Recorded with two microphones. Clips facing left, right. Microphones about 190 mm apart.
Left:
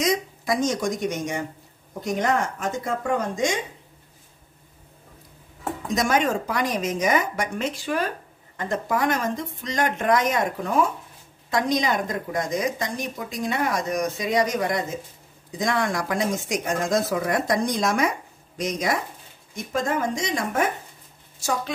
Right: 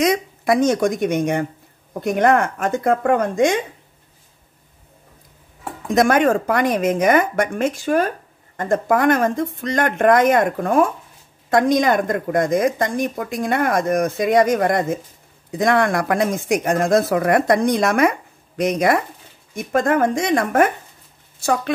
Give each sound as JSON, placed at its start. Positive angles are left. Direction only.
{"t": 0.0, "sound": "speech", "side_deg": -60}
{"t": 5.9, "sound": "speech", "side_deg": -55}